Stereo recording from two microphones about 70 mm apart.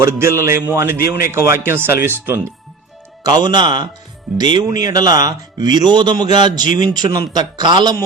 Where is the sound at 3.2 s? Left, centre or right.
Right.